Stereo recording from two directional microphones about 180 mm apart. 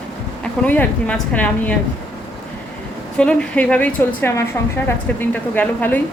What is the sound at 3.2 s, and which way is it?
Speech, 5° left (ahead or behind).